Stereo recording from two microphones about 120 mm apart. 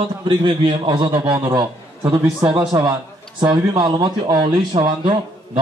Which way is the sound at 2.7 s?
25° right (ahead or behind).